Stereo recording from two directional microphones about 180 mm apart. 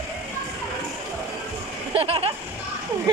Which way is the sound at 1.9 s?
30° right (ahead or behind).